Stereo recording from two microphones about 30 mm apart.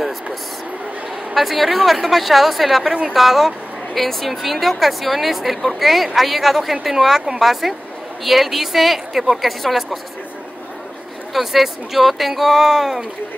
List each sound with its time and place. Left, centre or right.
1.3 s a woman's voice: centre
3.9 s speech: centre
4.4 s a woman's voice: centre
11.3 s a woman's voice: centre